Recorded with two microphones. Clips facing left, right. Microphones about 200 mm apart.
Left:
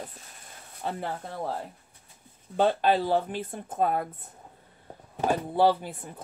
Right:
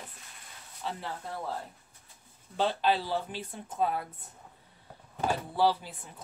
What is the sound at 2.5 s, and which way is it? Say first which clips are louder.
Speech: left 5 dB; 50° left (ahead or behind).